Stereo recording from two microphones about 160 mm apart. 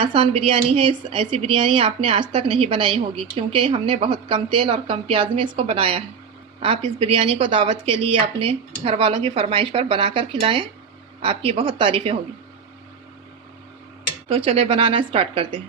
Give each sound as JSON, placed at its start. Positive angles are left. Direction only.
{"t": 0.0, "sound": "a woman's voice", "side_deg": -35}
{"t": 14.3, "sound": "a woman's voice", "side_deg": -35}